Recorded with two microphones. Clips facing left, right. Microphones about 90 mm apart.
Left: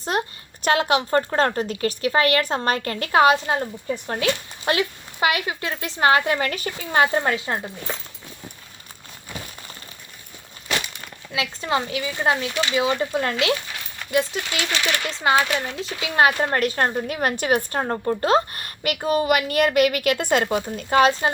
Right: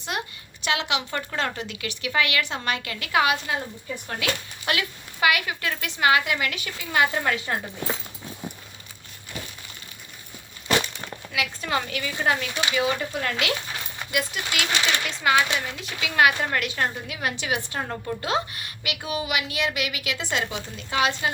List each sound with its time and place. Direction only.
0.0 s a woman's voice: 40° left (ahead or behind)
11.3 s a woman's voice: 25° left (ahead or behind)